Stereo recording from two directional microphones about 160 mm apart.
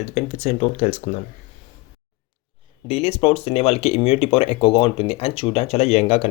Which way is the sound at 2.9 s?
35° left (ahead or behind).